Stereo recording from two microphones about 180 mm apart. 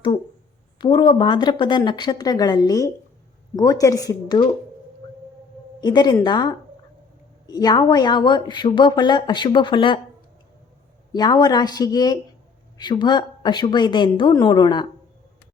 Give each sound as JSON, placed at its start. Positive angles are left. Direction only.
{"t": 0.8, "sound": "speech", "side_deg": 25}
{"t": 5.8, "sound": "speech", "side_deg": 25}
{"t": 11.1, "sound": "speech", "side_deg": 20}